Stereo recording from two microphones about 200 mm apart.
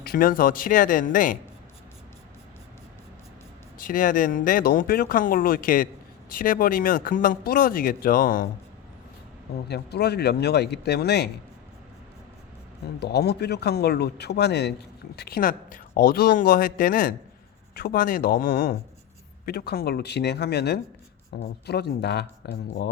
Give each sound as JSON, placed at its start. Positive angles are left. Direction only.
{"t": 0.0, "sound": "speech", "side_deg": 50}
{"t": 3.8, "sound": "speech", "side_deg": 45}
{"t": 9.6, "sound": "speech", "side_deg": 55}
{"t": 13.0, "sound": "speech", "side_deg": 55}